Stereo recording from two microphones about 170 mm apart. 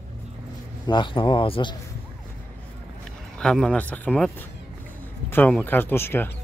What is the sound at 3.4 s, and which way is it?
Speech, 5° left (ahead or behind).